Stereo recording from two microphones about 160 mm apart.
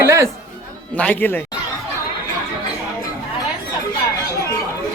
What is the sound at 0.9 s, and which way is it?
Speech, 10° left (ahead or behind).